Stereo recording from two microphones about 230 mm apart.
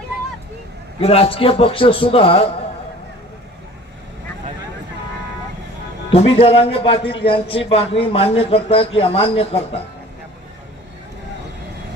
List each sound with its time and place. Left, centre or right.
1.0 s a man's voice: left
6.1 s a man's voice: left